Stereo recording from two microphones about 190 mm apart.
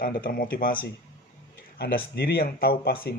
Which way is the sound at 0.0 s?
50° left (ahead or behind).